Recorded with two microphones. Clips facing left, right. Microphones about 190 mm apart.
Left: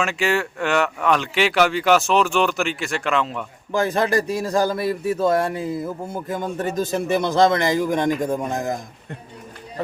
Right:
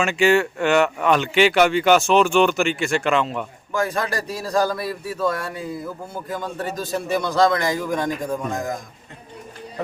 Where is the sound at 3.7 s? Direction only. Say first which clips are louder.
Left 4 dB; 25° left (ahead or behind).